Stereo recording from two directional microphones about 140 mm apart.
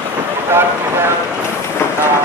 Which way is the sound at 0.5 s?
15° right (ahead or behind).